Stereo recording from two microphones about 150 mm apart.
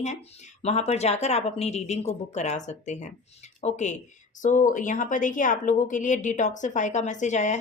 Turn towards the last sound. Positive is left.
turn(degrees=50)  # may be behind; listen again after turning